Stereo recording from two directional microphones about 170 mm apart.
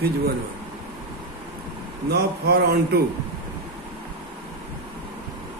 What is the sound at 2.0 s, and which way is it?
Speech, 70° right (ahead or behind).